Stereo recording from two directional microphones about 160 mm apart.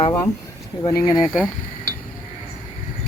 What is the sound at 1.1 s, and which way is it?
Speech, 5° right (ahead or behind).